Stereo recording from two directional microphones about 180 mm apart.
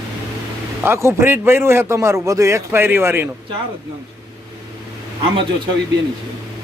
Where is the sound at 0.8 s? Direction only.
15° right (ahead or behind).